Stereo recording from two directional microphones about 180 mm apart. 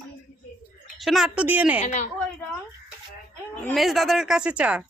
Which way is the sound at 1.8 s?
40° left (ahead or behind).